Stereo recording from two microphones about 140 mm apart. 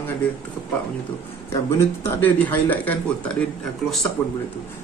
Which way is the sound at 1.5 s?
20° left (ahead or behind).